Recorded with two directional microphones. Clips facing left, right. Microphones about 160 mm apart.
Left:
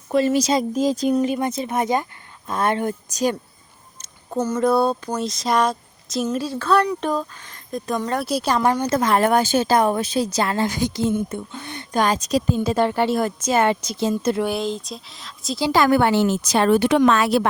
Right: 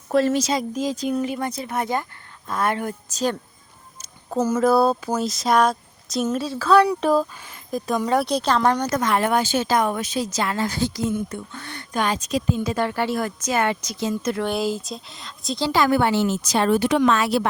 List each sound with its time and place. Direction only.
0.1 s speech: centre (ahead or behind)
0.5 s speech: 35° left (ahead or behind)
1.1 s a woman's voice: 20° left (ahead or behind)
4.3 s speech: 5° right (ahead or behind); by 8.9 s 10° left (ahead or behind)
8.9 s speech: 30° left (ahead or behind)
10.7 s a woman's voice: 15° left (ahead or behind)
11.9 s a woman's voice: 40° left (ahead or behind)
14.4 s speech: centre (ahead or behind)
15.7 s speech: 55° left (ahead or behind)